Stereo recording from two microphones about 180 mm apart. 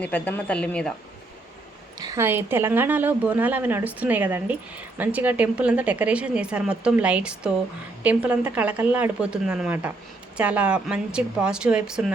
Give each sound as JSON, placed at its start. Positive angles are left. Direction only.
{"t": 0.0, "sound": "speech", "side_deg": 10}
{"t": 2.0, "sound": "a sound", "side_deg": -20}
{"t": 2.2, "sound": "a woman's voice", "side_deg": -10}